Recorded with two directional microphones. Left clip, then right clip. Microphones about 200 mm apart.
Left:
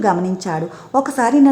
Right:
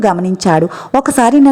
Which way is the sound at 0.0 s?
35° right (ahead or behind).